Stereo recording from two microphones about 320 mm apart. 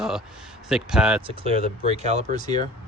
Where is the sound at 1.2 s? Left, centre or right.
Centre.